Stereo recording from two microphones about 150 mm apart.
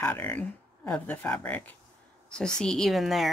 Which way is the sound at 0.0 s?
15° left (ahead or behind).